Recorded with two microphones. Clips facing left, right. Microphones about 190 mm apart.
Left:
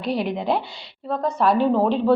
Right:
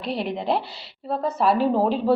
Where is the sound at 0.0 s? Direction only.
Centre (ahead or behind).